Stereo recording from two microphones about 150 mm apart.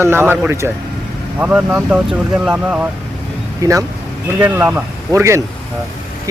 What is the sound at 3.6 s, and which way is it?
Speech, 25° right (ahead or behind).